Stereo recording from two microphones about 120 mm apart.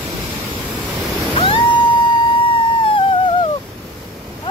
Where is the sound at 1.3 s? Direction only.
50° left (ahead or behind).